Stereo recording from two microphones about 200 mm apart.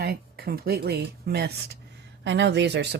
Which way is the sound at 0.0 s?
50° right (ahead or behind).